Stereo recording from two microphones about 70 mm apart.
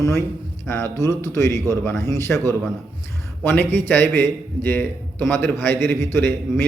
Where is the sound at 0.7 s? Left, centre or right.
Left.